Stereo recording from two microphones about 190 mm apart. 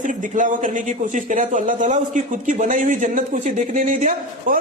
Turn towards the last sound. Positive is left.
turn(degrees=-40)  # may be behind; listen again after turning